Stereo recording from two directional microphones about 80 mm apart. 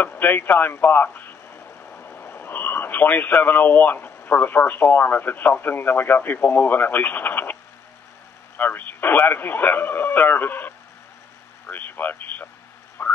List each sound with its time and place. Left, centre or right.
0.0 s speech: left
8.5 s speech: left
13.0 s frog: left